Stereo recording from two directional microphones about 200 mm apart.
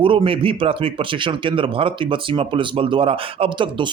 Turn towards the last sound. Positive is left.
turn(degrees=-25)  # may be behind; listen again after turning